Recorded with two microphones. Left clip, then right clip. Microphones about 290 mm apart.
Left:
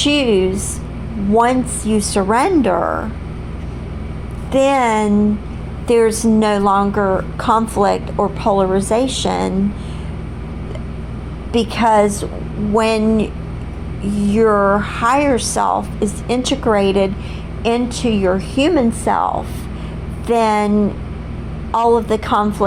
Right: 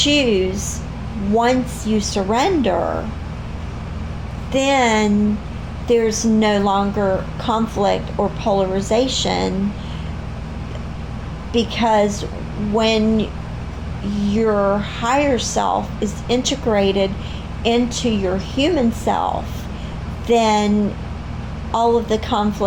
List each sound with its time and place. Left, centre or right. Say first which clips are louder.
0.0 s a woman's voice: left 2 dB; left
4.5 s a woman's voice: left 2 dB; left
11.5 s a woman's voice: left 3 dB; left
21.7 s a woman's voice: left 3 dB; left